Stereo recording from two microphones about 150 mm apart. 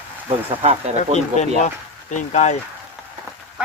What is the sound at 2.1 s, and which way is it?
Speech, 50° left (ahead or behind).